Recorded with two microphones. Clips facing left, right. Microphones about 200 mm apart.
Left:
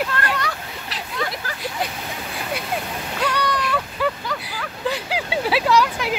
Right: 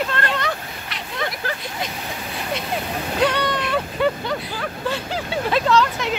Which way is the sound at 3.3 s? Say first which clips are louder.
Right 1 dB; 25° right (ahead or behind).